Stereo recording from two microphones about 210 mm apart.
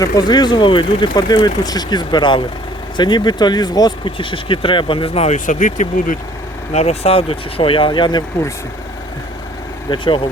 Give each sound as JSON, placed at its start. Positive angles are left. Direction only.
{"t": 0.0, "sound": "speech", "side_deg": 20}
{"t": 9.9, "sound": "speech", "side_deg": 20}